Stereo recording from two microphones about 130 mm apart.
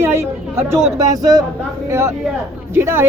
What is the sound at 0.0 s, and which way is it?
A woman's voice, 20° right (ahead or behind).